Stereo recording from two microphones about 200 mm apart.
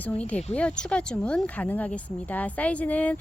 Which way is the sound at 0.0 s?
5° left (ahead or behind).